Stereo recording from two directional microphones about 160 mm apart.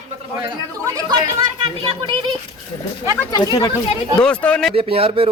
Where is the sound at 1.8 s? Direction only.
35° right (ahead or behind).